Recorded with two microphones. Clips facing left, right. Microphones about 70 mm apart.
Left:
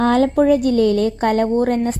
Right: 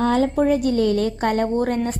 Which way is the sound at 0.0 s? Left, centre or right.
Left.